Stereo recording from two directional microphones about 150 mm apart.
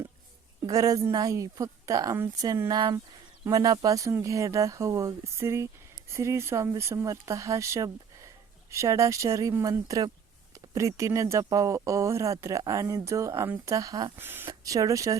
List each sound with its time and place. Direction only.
0.7 s speech: 20° right (ahead or behind)